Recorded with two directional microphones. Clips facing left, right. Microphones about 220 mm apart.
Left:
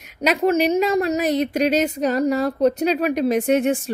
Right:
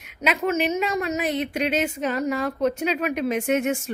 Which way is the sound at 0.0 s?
40° left (ahead or behind).